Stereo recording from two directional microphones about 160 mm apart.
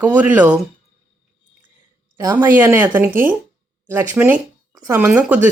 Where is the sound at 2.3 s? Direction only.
10° right (ahead or behind).